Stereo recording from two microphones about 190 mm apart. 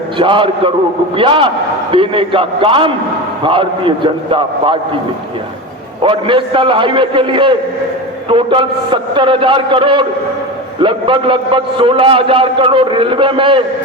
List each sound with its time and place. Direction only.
0.2 s a man's voice: 25° right (ahead or behind)
6.0 s a man's voice: 25° right (ahead or behind)